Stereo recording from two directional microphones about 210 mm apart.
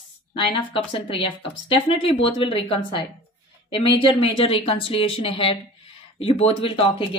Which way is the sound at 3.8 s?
25° left (ahead or behind).